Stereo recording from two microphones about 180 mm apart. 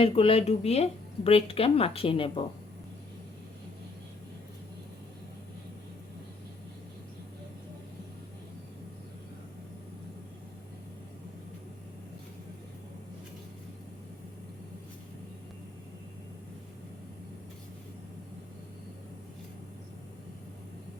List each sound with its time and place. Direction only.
0.0 s speech: 30° left (ahead or behind)